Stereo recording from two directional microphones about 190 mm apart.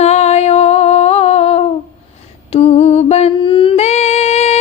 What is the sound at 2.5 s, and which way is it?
Mantra, 35° left (ahead or behind).